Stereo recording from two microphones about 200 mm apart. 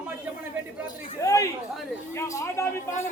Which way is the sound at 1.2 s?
15° left (ahead or behind).